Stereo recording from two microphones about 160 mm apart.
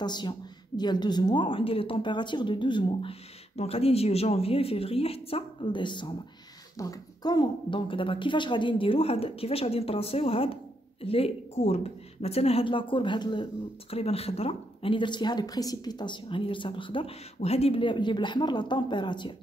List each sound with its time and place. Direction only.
0.0 s speech: 25° left (ahead or behind)